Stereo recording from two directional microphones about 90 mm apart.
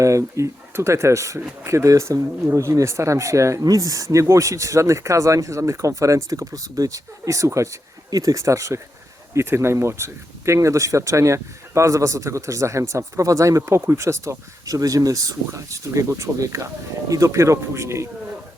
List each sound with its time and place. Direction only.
0.0 s speech: 35° right (ahead or behind)